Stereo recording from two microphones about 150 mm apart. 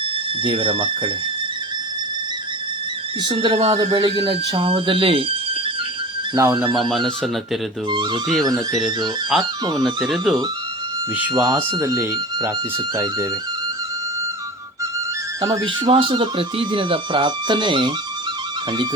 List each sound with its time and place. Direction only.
0.4 s speech: 35° right (ahead or behind)
3.2 s speech: 40° right (ahead or behind)
6.3 s speech: 25° right (ahead or behind)
6.9 s speech: centre (ahead or behind)
7.9 s speech: 30° right (ahead or behind)
9.3 s speech: centre (ahead or behind)
11.3 s speech: 25° right (ahead or behind)
15.4 s speech: 20° right (ahead or behind)
15.6 s speech: 35° right (ahead or behind)